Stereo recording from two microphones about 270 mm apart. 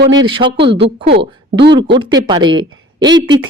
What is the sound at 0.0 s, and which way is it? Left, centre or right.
Speech, right.